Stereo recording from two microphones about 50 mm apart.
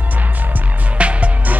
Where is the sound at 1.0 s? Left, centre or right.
Right.